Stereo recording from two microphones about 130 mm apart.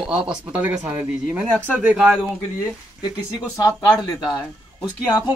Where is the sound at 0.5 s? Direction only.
10° right (ahead or behind).